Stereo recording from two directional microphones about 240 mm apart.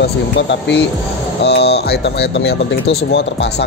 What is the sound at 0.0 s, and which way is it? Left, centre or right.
Speech, left.